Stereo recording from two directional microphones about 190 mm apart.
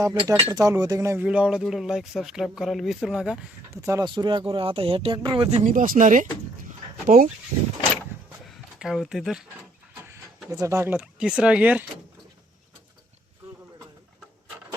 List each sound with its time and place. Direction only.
0.0 s speech: 15° right (ahead or behind)
3.8 s speech: 15° right (ahead or behind); by 6.2 s 40° right (ahead or behind)
6.7 s dog: 40° right (ahead or behind)
8.4 s speech: centre (ahead or behind)
10.5 s speech: 15° right (ahead or behind)